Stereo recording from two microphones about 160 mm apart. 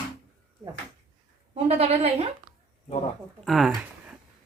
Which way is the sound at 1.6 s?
40° right (ahead or behind).